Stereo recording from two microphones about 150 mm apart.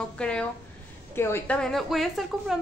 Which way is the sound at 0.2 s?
5° left (ahead or behind).